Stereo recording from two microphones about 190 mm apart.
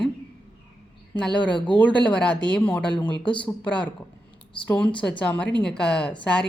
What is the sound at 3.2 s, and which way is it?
Speech, 25° left (ahead or behind).